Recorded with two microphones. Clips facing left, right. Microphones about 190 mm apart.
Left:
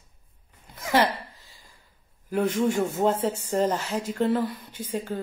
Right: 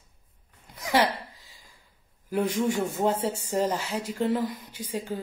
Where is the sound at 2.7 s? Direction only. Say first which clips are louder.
Left 3 dB; 15° left (ahead or behind).